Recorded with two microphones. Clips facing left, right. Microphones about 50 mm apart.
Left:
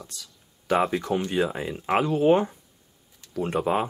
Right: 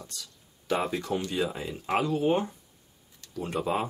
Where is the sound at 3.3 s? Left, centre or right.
Left.